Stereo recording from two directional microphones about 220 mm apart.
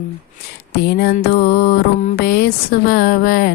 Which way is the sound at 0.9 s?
45° left (ahead or behind).